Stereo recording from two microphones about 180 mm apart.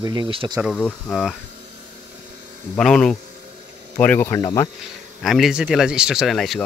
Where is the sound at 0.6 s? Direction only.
5° right (ahead or behind).